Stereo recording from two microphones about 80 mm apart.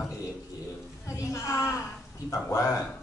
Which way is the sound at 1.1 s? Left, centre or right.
Left.